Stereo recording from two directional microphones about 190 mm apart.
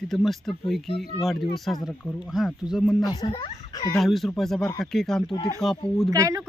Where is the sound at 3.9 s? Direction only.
Centre (ahead or behind).